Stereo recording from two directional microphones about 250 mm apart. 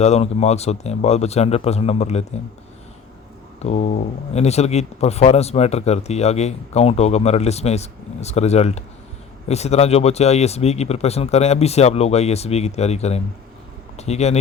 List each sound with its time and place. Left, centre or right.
0.0 s speech: left
3.6 s speech: left